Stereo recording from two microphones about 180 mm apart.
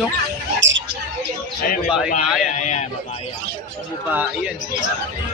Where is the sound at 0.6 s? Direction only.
90° right.